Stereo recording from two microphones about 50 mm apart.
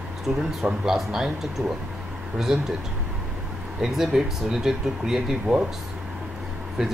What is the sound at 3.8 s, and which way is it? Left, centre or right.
Speech, centre.